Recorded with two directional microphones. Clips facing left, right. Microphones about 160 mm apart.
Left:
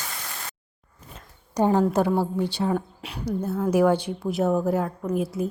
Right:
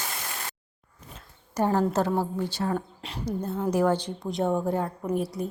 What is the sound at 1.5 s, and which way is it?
A woman's voice, 15° left (ahead or behind).